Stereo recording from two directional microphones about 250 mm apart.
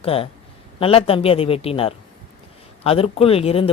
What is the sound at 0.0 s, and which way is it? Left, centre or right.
A man's voice, left.